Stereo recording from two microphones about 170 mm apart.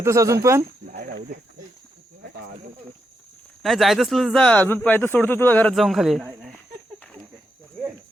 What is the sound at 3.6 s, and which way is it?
Speech, centre (ahead or behind).